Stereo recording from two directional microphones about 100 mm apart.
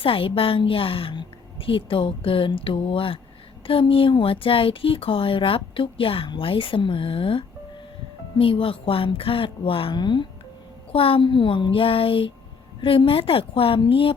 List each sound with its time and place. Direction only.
0.0 s speech: 65° left (ahead or behind)
10.9 s speech: 65° left (ahead or behind)